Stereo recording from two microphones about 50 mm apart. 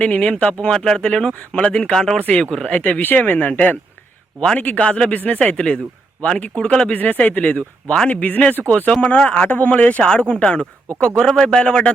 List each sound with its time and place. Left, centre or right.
0.0 s speech: left
0.7 s speech: centre
2.6 s a man's voice: left
4.4 s speech: left
6.9 s a man's voice: left
10.0 s speech: centre